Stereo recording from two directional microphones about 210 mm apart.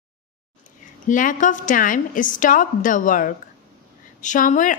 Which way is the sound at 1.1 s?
40° left (ahead or behind).